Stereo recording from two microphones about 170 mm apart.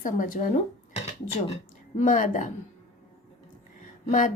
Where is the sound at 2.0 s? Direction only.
50° left (ahead or behind).